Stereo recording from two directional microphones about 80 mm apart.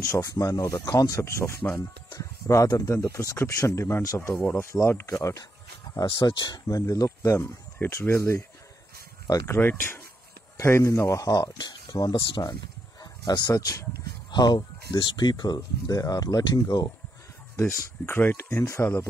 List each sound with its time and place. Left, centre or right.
0.0 s speech: left
1.2 s speech: left
6.0 s speech: left
6.7 s speech: left
7.8 s speech: left
8.2 s speech: left
9.5 s speech: left
11.5 s speech: left
14.3 s speech: left
17.6 s speech: left